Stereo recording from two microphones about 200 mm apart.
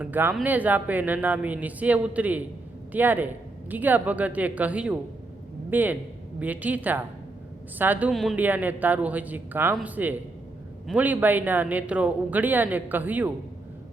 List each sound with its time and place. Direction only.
0.0 s speech: 10° right (ahead or behind)